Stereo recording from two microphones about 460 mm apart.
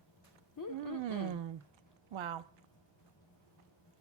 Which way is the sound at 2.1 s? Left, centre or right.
Right.